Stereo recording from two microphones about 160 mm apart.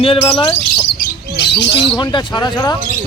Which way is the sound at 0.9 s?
90° left.